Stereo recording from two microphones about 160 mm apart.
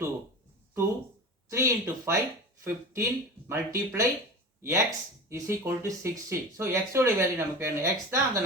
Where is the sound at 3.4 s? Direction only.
15° right (ahead or behind).